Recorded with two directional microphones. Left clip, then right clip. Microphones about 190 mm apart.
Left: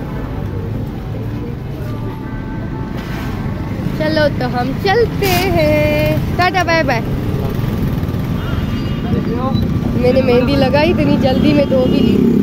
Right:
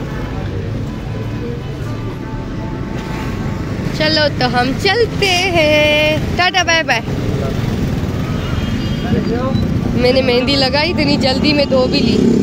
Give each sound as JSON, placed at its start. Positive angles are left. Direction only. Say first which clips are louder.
{"t": 4.0, "sound": "speech", "louder": "right 1 dB", "side_deg": 15}
{"t": 4.6, "sound": "speech", "louder": "even", "side_deg": 0}
{"t": 10.0, "sound": "speech", "louder": "even", "side_deg": 5}